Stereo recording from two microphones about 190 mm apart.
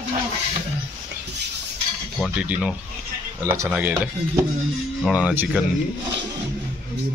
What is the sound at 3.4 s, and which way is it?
A man's voice, 10° right (ahead or behind).